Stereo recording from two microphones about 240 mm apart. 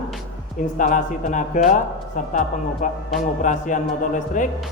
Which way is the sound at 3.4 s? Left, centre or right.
Left.